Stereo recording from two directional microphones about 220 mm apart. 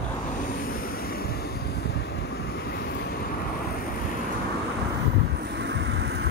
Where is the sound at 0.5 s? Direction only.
40° left (ahead or behind).